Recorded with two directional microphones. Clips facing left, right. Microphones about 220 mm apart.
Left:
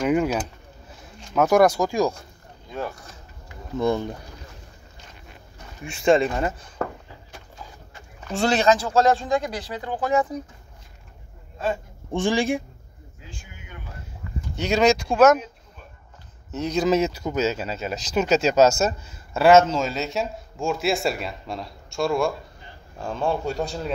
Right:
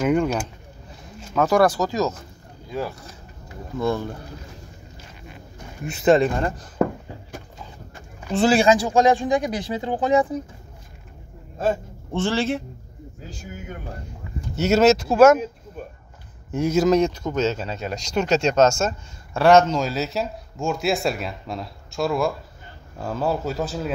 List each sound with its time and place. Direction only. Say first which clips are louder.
0.0 s speech: right 1 dB; 5° left (ahead or behind)
5.9 s speech: right 2 dB; centre (ahead or behind)
8.2 s speech: right 4 dB; 5° right (ahead or behind); by 10.2 s 20° right (ahead or behind)
11.5 s a man's voice: right 4 dB; 50° right (ahead or behind)
12.1 s speech: left 1 dB; 15° left (ahead or behind)
13.3 s speech: right 9 dB; 40° right (ahead or behind)
14.5 s speech: right 3 dB; 5° right (ahead or behind)
16.5 s speech: right 3 dB; 5° right (ahead or behind)